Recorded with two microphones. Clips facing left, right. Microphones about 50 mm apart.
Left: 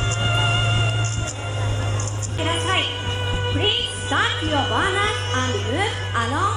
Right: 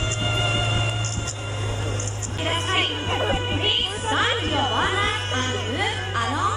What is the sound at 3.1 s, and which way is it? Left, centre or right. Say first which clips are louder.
Music: right 2 dB; right.